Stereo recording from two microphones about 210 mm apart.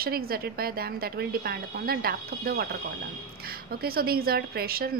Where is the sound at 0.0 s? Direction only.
45° right (ahead or behind).